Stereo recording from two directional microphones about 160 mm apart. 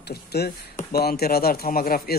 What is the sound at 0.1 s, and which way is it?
Speech, 80° left.